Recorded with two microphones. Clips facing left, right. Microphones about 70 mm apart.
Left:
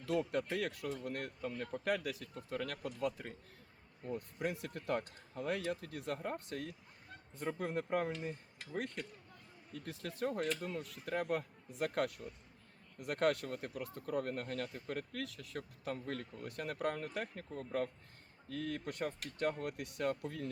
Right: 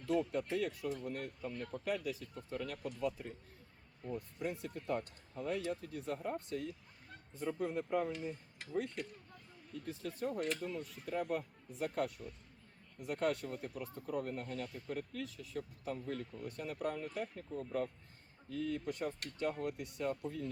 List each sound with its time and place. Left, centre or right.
0.0 s speech: left
4.4 s speech: left